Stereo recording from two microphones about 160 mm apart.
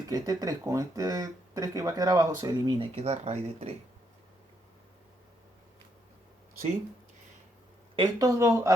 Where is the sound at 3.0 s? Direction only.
40° right (ahead or behind).